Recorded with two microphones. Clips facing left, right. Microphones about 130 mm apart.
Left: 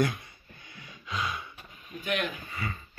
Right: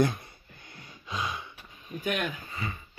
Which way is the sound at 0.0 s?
30° right (ahead or behind).